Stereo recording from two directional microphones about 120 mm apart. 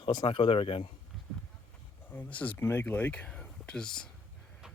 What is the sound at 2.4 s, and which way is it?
Speech, 15° left (ahead or behind).